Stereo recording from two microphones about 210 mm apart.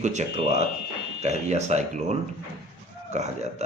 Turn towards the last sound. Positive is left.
turn(degrees=-30)  # may be behind; listen again after turning